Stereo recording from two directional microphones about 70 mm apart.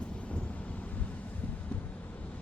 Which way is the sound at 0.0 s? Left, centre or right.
Centre.